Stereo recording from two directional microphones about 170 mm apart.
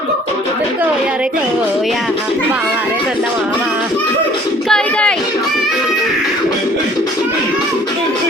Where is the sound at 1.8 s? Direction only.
Centre (ahead or behind).